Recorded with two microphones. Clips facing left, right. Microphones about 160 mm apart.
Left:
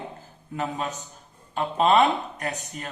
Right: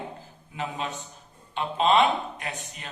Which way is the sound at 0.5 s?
40° left (ahead or behind).